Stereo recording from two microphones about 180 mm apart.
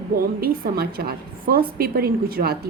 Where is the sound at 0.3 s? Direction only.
55° right (ahead or behind).